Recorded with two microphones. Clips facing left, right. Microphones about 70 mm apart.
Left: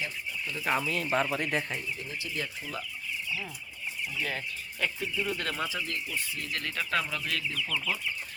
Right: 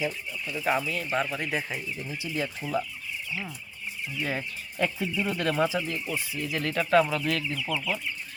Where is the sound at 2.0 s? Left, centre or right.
Centre.